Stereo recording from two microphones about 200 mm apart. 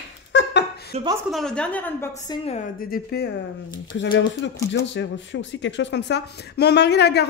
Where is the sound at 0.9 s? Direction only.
30° right (ahead or behind).